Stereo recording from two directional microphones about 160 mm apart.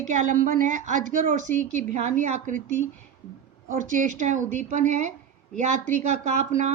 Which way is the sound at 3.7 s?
55° right (ahead or behind).